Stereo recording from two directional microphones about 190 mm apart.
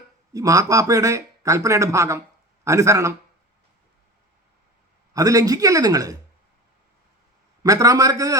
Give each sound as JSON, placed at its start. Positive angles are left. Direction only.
{"t": 0.3, "sound": "speech", "side_deg": -20}
{"t": 5.1, "sound": "a man's voice", "side_deg": -20}
{"t": 7.6, "sound": "speech", "side_deg": -20}